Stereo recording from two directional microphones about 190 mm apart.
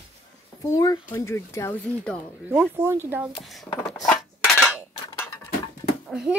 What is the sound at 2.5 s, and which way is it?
Speech, 10° right (ahead or behind).